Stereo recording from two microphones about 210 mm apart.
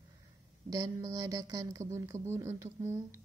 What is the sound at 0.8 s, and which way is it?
A woman's voice, 15° right (ahead or behind).